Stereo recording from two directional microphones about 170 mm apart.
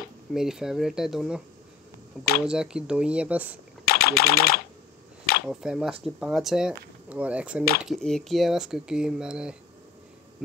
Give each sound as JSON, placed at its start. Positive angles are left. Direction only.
{"t": 0.3, "sound": "speech", "side_deg": -5}
{"t": 2.4, "sound": "speech", "side_deg": -5}
{"t": 3.8, "sound": "speech", "side_deg": 65}
{"t": 5.5, "sound": "speech", "side_deg": -5}